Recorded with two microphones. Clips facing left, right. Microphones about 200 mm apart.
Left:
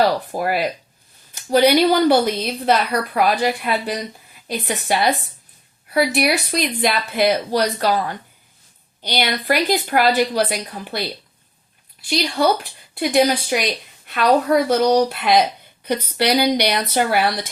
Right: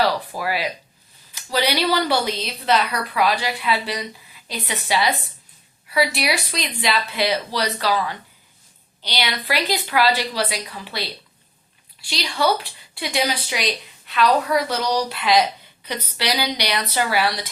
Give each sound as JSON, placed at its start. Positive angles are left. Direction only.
{"t": 0.3, "sound": "a woman's voice", "side_deg": 50}